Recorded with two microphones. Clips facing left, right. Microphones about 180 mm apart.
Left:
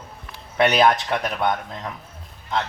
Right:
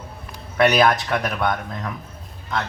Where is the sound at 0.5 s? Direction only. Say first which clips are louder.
Right 1 dB; 25° left (ahead or behind).